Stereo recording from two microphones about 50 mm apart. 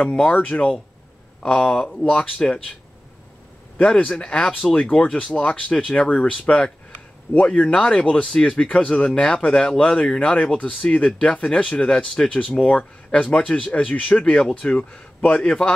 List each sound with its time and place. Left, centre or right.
0.0 s speech: centre
3.8 s speech: centre